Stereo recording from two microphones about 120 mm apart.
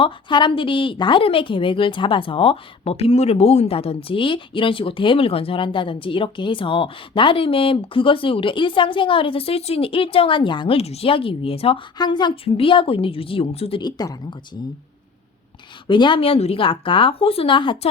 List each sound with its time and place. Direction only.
0.0 s a woman's voice: 40° left (ahead or behind)
11.9 s a woman's voice: 40° left (ahead or behind); by 13.8 s 55° left (ahead or behind)
13.8 s speech: 35° left (ahead or behind)
15.9 s a woman's voice: 40° left (ahead or behind)